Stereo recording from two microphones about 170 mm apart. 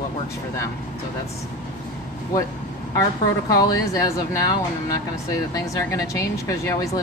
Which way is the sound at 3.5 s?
20° left (ahead or behind).